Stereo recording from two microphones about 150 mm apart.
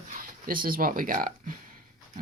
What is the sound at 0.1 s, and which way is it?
Speech, 70° right (ahead or behind).